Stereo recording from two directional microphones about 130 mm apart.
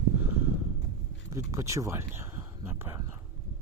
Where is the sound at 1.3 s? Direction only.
25° right (ahead or behind).